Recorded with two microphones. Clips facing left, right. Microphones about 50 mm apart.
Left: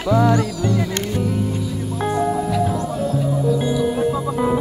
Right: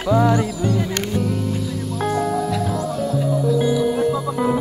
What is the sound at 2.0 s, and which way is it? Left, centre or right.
Music, centre.